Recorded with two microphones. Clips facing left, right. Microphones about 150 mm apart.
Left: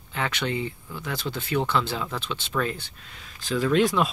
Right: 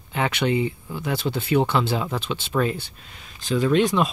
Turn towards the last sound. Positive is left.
turn(degrees=0)  # may be behind; listen again after turning